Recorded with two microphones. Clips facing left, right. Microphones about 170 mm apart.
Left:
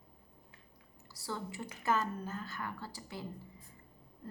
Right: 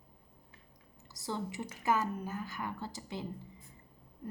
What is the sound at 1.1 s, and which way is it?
A woman's voice, 20° right (ahead or behind).